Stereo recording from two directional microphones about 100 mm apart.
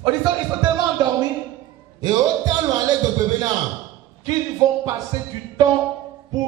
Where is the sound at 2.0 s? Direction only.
40° right (ahead or behind).